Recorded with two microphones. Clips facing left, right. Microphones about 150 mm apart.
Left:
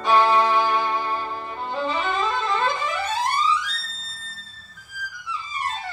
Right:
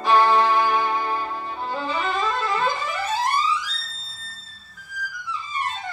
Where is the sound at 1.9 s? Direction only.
Centre (ahead or behind).